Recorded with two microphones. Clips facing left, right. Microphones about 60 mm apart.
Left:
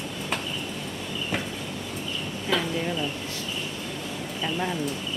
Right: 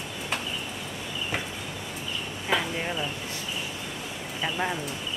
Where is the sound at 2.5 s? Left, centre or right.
Right.